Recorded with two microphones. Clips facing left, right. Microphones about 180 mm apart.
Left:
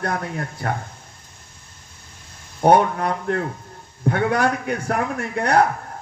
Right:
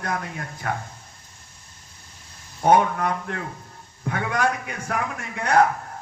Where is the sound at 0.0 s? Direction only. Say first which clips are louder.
Left 4 dB; 35° left (ahead or behind).